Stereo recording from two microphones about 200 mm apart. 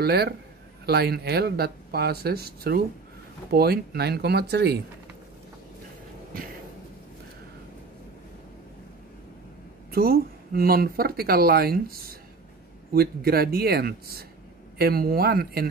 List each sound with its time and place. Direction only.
0.0 s speech: 50° right (ahead or behind)
9.8 s speech: 50° right (ahead or behind)